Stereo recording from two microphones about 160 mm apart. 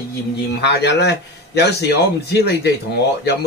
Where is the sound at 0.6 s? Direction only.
90° left.